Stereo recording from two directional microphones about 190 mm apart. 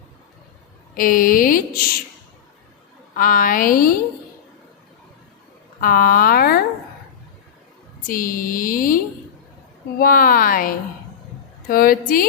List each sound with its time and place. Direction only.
0.9 s speech: 45° left (ahead or behind)
3.2 s speech: 45° left (ahead or behind)
5.8 s speech: 50° left (ahead or behind)
8.0 s speech: 45° left (ahead or behind)
10.0 s speech: 50° left (ahead or behind)